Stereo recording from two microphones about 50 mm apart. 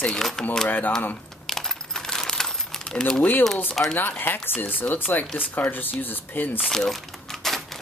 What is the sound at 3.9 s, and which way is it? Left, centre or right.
Speech, left.